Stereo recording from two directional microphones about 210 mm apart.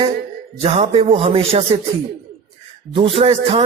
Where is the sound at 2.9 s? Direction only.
25° right (ahead or behind).